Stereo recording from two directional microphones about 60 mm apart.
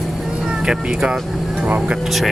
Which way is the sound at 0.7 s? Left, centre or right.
Centre.